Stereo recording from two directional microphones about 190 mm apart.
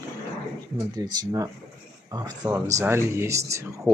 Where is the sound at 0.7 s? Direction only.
20° right (ahead or behind).